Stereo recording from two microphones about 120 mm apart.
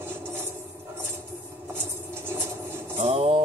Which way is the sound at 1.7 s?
20° right (ahead or behind).